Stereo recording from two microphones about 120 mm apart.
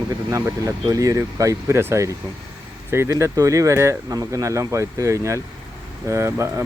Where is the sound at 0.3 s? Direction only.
25° right (ahead or behind).